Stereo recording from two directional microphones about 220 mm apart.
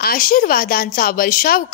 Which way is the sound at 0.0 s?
40° left (ahead or behind).